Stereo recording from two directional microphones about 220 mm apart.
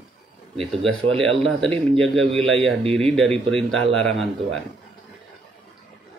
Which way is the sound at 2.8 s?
25° right (ahead or behind).